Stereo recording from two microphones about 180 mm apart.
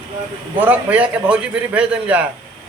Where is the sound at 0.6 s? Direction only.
10° right (ahead or behind).